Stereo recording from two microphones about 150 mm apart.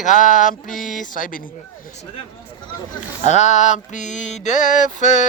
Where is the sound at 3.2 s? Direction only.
50° left (ahead or behind).